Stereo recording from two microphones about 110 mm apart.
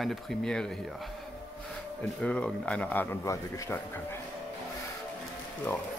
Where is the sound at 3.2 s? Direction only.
30° left (ahead or behind).